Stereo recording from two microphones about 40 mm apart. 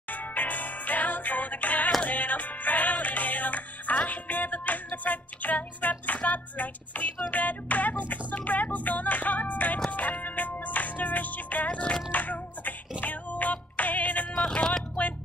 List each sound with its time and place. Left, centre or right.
0.1 s music: left
8.1 s speech: left
8.7 s music: left
12.1 s music: left
14.4 s a sound: left